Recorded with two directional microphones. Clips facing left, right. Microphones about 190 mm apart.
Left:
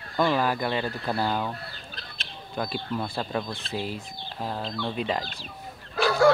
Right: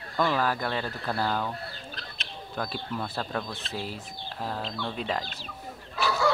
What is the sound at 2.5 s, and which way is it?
Speech, 5° left (ahead or behind).